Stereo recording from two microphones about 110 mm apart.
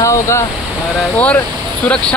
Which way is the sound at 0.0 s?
25° left (ahead or behind).